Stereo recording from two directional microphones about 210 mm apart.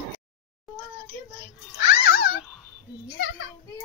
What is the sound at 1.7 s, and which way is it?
Cat, 45° left (ahead or behind).